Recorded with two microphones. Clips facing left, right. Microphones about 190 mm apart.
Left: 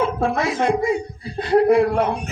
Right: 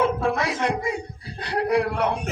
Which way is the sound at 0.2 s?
50° left (ahead or behind).